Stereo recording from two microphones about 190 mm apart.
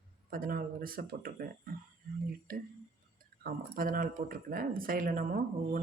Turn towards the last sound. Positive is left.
turn(degrees=-45)  # may be behind; listen again after turning